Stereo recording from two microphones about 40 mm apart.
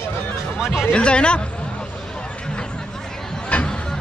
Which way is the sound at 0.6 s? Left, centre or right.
Centre.